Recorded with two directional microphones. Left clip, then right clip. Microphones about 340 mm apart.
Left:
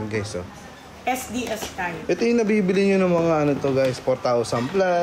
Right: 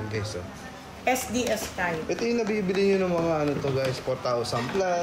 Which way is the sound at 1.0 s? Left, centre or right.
Centre.